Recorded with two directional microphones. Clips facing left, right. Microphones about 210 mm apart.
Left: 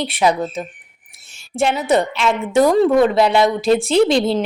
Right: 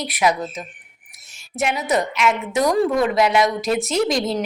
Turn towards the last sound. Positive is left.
turn(degrees=30)  # may be behind; listen again after turning